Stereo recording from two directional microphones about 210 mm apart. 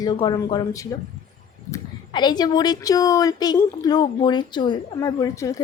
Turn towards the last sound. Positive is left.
turn(degrees=15)  # may be behind; listen again after turning